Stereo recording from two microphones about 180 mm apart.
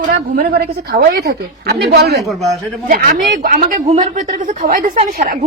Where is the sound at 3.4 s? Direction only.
50° right (ahead or behind).